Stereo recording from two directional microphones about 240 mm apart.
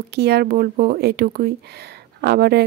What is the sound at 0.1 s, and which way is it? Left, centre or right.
Speech, right.